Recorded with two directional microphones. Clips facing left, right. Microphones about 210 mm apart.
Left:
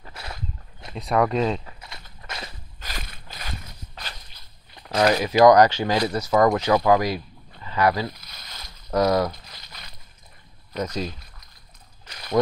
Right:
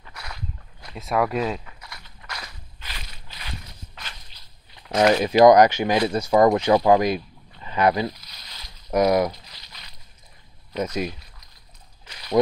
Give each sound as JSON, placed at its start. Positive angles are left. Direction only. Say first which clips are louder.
{"t": 0.0, "sound": "a sound", "louder": "left 2 dB", "side_deg": 30}
{"t": 0.9, "sound": "speech", "louder": "left 2 dB", "side_deg": 0}
{"t": 1.7, "sound": "a sound", "louder": "left 1 dB", "side_deg": 25}
{"t": 2.2, "sound": "walk", "louder": "left 2 dB", "side_deg": 25}
{"t": 2.8, "sound": "walk", "louder": "left 5 dB", "side_deg": 50}
{"t": 5.1, "sound": "speech", "louder": "right 1 dB", "side_deg": -25}
{"t": 8.1, "sound": "a sound", "louder": "left 1 dB", "side_deg": 50}
{"t": 8.9, "sound": "speech", "louder": "right 2 dB", "side_deg": -15}
{"t": 9.4, "sound": "boat", "louder": "left 3 dB", "side_deg": 50}
{"t": 10.8, "sound": "speech", "louder": "right 2 dB", "side_deg": -15}
{"t": 12.1, "sound": "slosh", "louder": "right 1 dB", "side_deg": 50}